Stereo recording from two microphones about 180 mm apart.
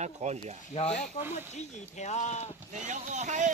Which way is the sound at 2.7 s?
40° right (ahead or behind).